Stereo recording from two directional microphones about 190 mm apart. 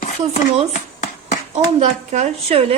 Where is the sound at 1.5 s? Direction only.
35° right (ahead or behind).